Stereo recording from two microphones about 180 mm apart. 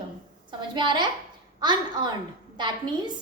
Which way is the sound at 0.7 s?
25° right (ahead or behind).